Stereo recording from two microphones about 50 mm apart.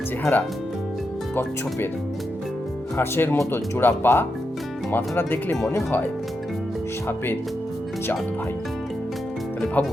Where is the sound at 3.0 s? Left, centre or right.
Left.